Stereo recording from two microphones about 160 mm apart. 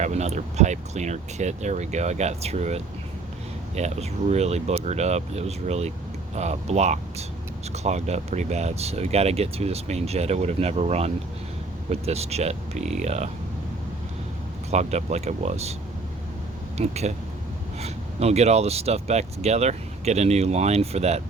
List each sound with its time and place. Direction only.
0.0 s speech: 45° right (ahead or behind)
14.7 s speech: 45° right (ahead or behind)
16.7 s speech: 45° right (ahead or behind)